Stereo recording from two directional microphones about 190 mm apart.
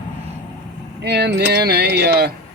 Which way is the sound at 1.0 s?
60° right (ahead or behind).